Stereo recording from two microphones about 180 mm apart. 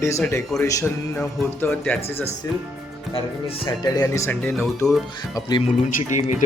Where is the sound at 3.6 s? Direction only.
20° left (ahead or behind); by 5.0 s 5° left (ahead or behind).